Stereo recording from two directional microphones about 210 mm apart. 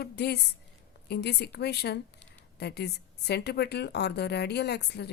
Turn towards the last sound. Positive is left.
turn(degrees=50)  # may be behind; listen again after turning